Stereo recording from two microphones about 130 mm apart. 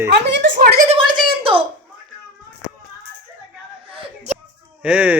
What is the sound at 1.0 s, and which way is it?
Speech, 40° right (ahead or behind).